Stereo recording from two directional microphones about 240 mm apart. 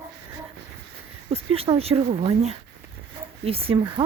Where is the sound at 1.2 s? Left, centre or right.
Right.